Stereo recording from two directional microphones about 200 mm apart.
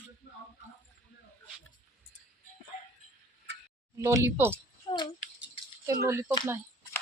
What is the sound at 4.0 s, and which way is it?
Speech, 15° right (ahead or behind).